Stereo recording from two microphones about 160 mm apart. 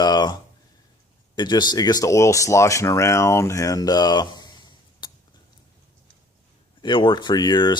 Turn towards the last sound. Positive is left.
turn(degrees=30)  # may be behind; listen again after turning